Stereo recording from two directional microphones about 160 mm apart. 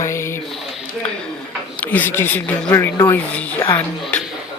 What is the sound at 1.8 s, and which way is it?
A woman's voice, 10° left (ahead or behind).